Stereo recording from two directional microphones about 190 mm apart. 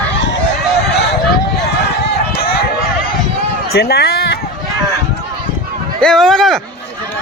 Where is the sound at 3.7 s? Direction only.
55° left (ahead or behind).